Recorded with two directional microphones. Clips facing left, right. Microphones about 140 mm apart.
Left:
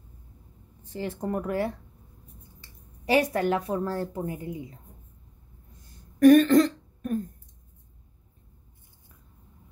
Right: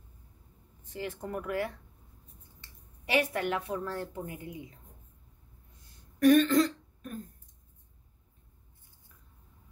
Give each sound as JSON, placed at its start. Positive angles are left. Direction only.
{"t": 0.8, "sound": "a woman's voice", "side_deg": 35}
{"t": 3.1, "sound": "a woman's voice", "side_deg": 35}
{"t": 6.1, "sound": "throat clearing", "side_deg": 45}